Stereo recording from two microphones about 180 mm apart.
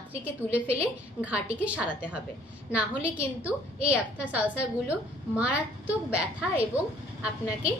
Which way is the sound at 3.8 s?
10° right (ahead or behind).